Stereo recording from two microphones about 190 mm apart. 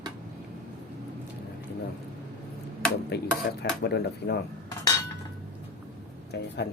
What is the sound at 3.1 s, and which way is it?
Dishes, 60° left (ahead or behind).